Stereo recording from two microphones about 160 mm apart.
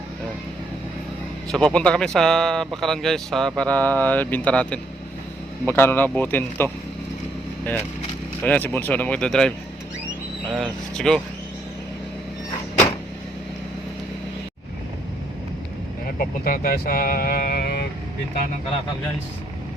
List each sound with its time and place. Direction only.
1.5 s speech: 5° left (ahead or behind)
8.4 s speech: 10° left (ahead or behind)
10.5 s speech: 5° left (ahead or behind)
16.1 s speech: 65° left (ahead or behind); by 17.8 s 85° left